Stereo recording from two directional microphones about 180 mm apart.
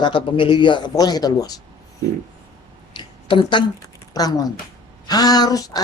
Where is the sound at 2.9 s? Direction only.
25° left (ahead or behind).